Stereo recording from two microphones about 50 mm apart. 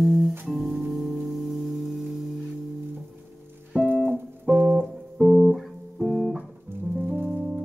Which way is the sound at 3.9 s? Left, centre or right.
Right.